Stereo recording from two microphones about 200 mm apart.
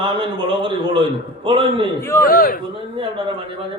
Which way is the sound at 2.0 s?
15° left (ahead or behind).